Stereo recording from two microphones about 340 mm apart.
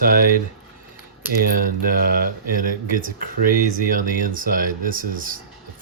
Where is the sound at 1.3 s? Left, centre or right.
Right.